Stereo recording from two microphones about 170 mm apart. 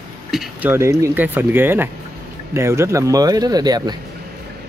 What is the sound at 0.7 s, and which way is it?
Speech, 15° right (ahead or behind).